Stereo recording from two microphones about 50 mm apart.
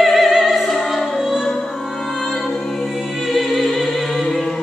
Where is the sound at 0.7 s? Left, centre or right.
Centre.